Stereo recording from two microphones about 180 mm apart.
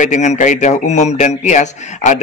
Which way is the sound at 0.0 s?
40° left (ahead or behind).